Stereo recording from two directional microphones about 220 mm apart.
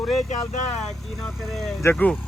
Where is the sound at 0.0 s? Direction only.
Centre (ahead or behind).